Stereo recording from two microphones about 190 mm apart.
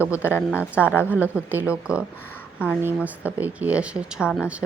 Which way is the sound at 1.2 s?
10° right (ahead or behind).